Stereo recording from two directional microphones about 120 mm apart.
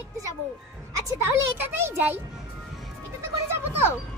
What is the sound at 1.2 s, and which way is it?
A child's voice, 20° right (ahead or behind).